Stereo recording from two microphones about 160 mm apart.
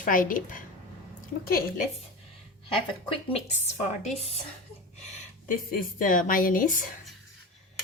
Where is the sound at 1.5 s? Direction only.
70° left (ahead or behind).